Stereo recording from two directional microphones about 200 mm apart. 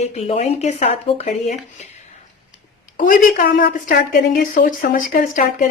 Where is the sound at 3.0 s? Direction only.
45° left (ahead or behind).